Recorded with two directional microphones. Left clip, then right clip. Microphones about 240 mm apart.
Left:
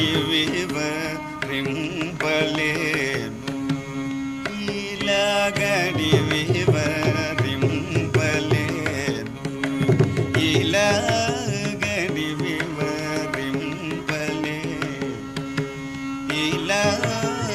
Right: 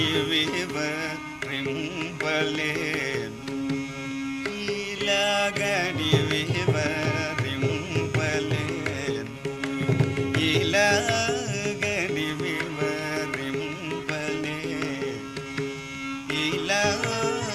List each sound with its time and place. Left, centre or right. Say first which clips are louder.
0.0 s carnatic music: left 3 dB; centre
2.2 s music: left 4 dB; centre
5.0 s music: left 3 dB; centre
10.4 s music: left 2 dB; centre
16.3 s music: left 3 dB; right